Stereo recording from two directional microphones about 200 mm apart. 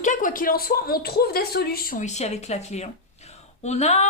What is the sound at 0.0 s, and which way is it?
A woman's voice, 40° left (ahead or behind).